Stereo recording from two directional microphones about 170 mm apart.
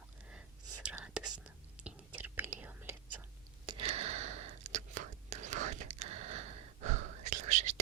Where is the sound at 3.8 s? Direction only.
35° right (ahead or behind).